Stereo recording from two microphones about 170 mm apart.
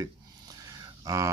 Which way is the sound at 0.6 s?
20° right (ahead or behind).